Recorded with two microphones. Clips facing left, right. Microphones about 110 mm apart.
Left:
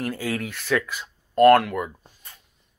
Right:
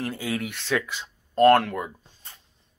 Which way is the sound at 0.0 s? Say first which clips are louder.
Left 1 dB; 20° right (ahead or behind).